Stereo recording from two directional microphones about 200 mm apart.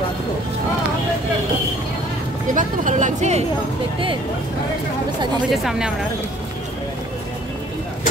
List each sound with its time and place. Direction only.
2.5 s speech: 40° right (ahead or behind)
5.5 s speech: centre (ahead or behind)